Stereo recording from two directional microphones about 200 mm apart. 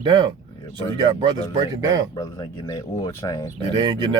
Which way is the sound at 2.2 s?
20° left (ahead or behind).